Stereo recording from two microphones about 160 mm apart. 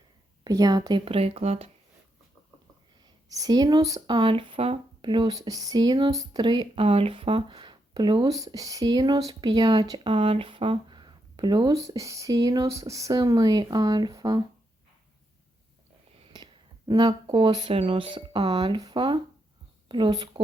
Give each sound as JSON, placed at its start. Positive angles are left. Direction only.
{"t": 0.4, "sound": "speech", "side_deg": -25}
{"t": 3.2, "sound": "speech", "side_deg": -20}
{"t": 16.3, "sound": "speech", "side_deg": -25}